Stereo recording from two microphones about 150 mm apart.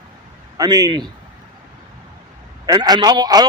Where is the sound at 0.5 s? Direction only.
25° right (ahead or behind).